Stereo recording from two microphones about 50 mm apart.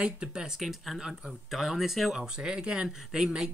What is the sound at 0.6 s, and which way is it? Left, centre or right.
Speech, centre.